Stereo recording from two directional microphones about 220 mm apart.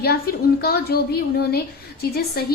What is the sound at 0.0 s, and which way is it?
A woman's voice, 45° left (ahead or behind).